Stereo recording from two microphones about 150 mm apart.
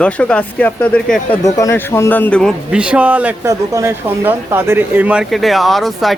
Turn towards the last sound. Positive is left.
turn(degrees=0)  # may be behind; listen again after turning